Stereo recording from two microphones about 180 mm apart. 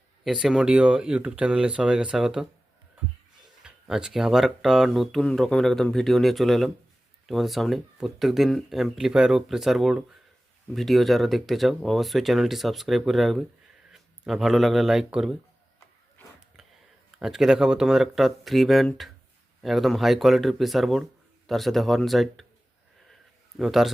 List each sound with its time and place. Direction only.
0.3 s speech: centre (ahead or behind)
3.6 s speech: 5° right (ahead or behind)
16.6 s a sound: centre (ahead or behind)
17.2 s speech: 5° right (ahead or behind)
23.6 s speech: centre (ahead or behind)